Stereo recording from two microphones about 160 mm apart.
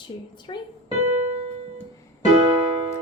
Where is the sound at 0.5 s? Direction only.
35° left (ahead or behind).